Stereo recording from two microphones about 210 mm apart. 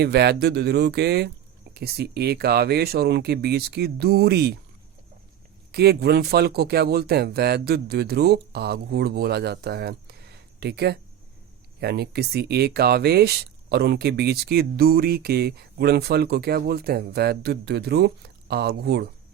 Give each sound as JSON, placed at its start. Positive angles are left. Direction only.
{"t": 0.0, "sound": "speech", "side_deg": -50}
{"t": 5.7, "sound": "speech", "side_deg": -50}